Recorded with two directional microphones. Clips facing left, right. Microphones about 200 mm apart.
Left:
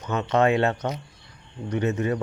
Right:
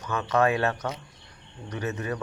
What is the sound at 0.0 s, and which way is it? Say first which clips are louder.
Speech: left 3 dB; 25° left (ahead or behind).